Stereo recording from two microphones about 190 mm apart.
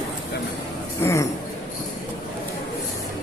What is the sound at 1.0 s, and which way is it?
Speech, 15° left (ahead or behind).